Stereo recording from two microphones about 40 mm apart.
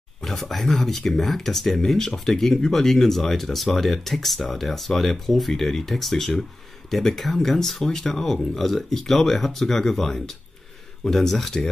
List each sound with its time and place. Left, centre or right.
0.2 s speech: centre